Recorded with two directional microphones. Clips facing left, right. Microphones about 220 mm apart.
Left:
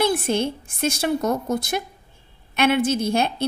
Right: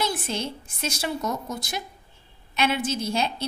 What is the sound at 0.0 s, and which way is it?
A woman's voice, 55° left (ahead or behind).